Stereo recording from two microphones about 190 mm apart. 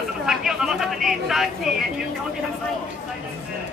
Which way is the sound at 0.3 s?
Centre (ahead or behind).